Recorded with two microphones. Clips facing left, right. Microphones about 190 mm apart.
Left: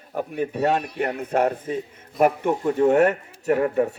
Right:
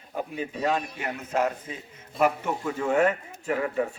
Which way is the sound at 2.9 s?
65° left (ahead or behind).